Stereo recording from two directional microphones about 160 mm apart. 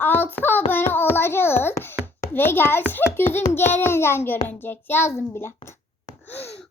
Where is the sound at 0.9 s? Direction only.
15° left (ahead or behind).